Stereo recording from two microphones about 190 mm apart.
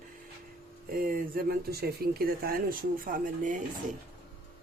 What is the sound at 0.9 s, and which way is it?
Speech, 50° right (ahead or behind).